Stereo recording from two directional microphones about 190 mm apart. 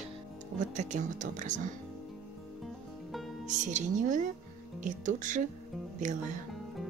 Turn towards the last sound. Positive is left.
turn(degrees=-40)  # may be behind; listen again after turning